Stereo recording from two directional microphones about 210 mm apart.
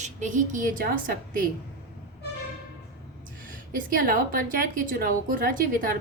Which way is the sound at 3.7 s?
40° right (ahead or behind).